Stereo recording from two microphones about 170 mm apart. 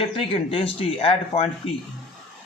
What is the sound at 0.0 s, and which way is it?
Speech, 35° left (ahead or behind).